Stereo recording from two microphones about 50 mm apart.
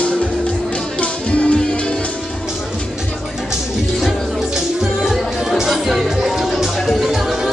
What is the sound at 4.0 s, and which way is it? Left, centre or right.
Music, centre.